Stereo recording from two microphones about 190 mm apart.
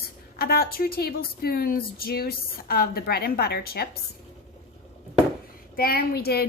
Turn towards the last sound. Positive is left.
turn(degrees=55)  # may be behind; listen again after turning